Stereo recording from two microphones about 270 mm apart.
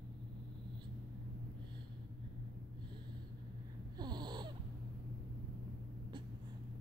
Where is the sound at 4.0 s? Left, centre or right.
Centre.